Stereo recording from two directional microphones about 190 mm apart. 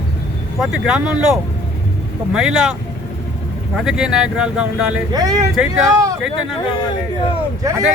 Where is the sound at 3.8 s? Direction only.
5° right (ahead or behind).